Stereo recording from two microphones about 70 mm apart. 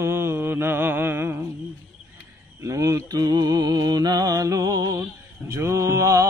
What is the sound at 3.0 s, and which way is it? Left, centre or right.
Music, right.